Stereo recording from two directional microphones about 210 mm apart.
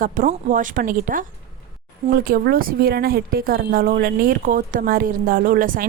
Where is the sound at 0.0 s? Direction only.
40° right (ahead or behind).